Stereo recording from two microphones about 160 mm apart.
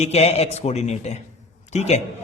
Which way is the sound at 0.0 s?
40° left (ahead or behind).